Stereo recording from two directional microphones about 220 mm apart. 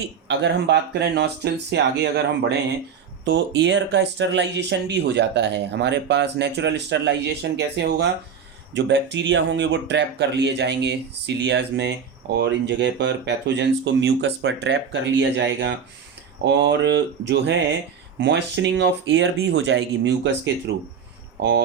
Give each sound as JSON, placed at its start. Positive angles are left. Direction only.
{"t": 0.3, "sound": "speech", "side_deg": -50}